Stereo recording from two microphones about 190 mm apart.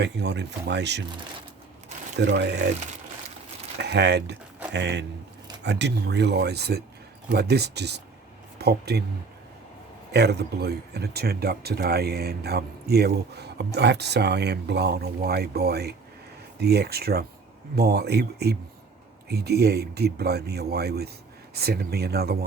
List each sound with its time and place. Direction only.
0.0 s speech: 65° right (ahead or behind)
2.1 s speech: 65° right (ahead or behind)
3.8 s speech: 60° right (ahead or behind)
10.1 s speech: 60° right (ahead or behind)